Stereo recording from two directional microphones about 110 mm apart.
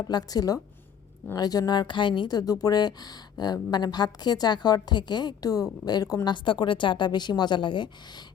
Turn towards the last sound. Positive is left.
turn(degrees=45)  # may be behind; listen again after turning